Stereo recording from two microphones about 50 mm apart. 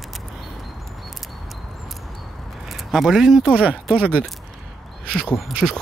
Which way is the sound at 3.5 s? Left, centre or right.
Right.